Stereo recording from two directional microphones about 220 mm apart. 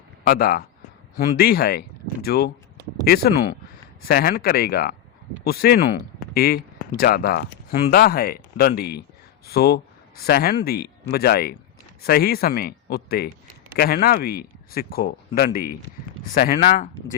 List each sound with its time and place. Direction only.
0.3 s speech: 45° left (ahead or behind)